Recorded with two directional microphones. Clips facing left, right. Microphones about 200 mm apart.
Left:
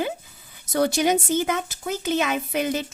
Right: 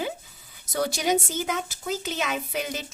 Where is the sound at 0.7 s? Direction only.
55° left (ahead or behind).